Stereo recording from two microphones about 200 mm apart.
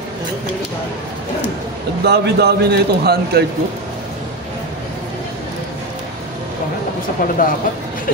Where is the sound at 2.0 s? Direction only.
55° right (ahead or behind).